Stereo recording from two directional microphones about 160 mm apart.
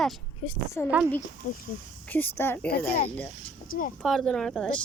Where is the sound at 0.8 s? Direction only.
10° left (ahead or behind).